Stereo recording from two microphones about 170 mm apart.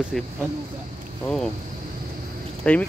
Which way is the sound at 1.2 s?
5° left (ahead or behind).